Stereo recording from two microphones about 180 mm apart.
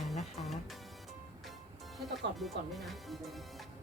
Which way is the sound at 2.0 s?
Centre (ahead or behind).